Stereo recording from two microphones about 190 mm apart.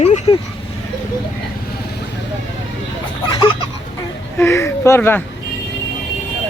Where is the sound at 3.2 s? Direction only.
20° left (ahead or behind).